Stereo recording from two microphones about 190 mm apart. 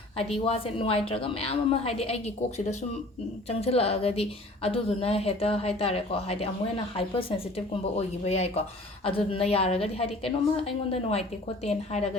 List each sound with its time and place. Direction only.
0.4 s a woman's voice: 30° left (ahead or behind)